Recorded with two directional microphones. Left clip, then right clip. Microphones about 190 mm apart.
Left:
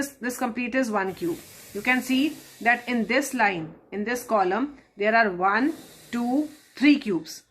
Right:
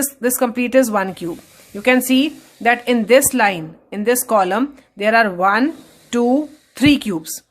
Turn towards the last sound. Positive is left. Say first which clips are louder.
# right 5 dB
turn(degrees=-45)  # may be behind; listen again after turning